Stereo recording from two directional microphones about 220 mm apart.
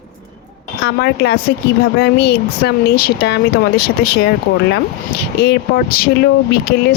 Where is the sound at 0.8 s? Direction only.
45° left (ahead or behind).